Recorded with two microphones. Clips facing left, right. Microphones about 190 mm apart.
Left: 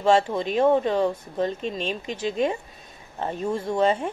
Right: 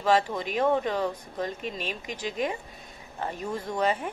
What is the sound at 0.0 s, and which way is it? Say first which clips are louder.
A woman's voice: left 4 dB; 25° left (ahead or behind).